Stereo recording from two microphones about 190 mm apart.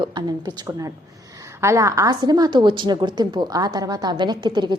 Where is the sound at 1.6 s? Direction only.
15° right (ahead or behind).